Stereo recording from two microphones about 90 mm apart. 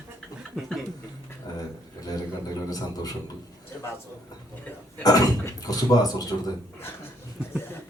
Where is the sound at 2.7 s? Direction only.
45° left (ahead or behind).